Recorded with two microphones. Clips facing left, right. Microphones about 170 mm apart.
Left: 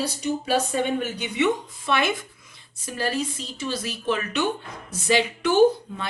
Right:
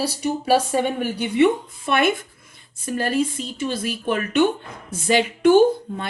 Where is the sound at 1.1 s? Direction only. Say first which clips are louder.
Right 10 dB; 55° right (ahead or behind).